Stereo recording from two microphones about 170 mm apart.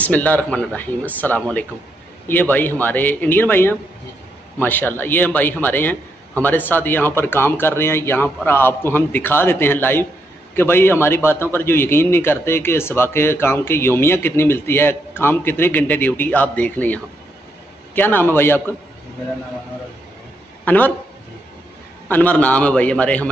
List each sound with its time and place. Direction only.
0.0 s a man's voice: 10° left (ahead or behind)
20.6 s a man's voice: 10° left (ahead or behind)
22.1 s a man's voice: 10° left (ahead or behind)